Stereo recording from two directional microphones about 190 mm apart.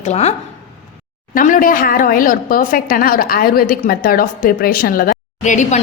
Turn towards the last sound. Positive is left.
turn(degrees=40)  # may be behind; listen again after turning